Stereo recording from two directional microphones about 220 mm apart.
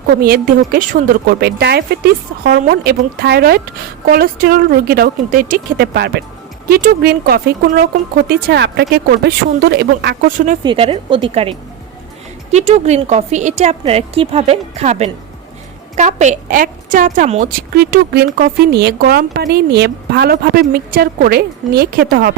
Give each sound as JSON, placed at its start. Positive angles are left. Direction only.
{"t": 0.2, "sound": "speech", "side_deg": -45}
{"t": 10.6, "sound": "a woman's voice", "side_deg": -25}
{"t": 17.7, "sound": "speech", "side_deg": -45}